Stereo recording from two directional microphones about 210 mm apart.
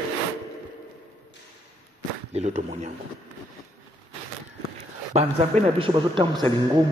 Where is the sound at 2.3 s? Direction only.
30° right (ahead or behind).